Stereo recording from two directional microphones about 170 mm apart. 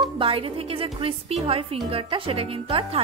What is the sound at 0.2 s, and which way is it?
Speech, 35° right (ahead or behind).